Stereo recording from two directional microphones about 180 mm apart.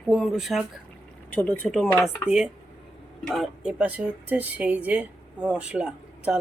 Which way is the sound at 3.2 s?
Centre (ahead or behind).